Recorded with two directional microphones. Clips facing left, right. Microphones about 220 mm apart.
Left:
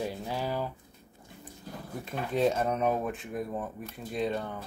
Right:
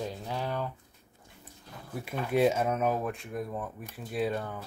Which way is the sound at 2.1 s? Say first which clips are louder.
Right 2 dB; 10° right (ahead or behind).